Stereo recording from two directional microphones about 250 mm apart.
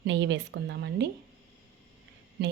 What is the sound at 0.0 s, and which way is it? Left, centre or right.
A woman's voice, right.